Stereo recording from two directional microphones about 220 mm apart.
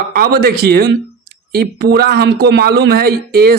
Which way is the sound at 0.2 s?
45° right (ahead or behind).